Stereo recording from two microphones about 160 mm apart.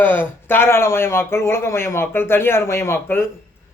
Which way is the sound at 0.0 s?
10° left (ahead or behind).